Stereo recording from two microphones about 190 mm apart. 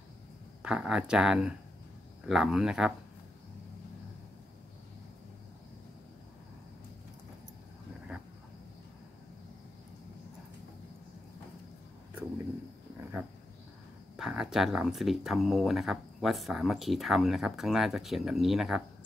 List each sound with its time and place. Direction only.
0.6 s speech: 5° right (ahead or behind)
14.1 s speech: 5° right (ahead or behind)